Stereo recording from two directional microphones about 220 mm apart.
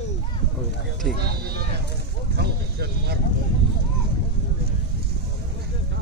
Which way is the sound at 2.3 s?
45° right (ahead or behind).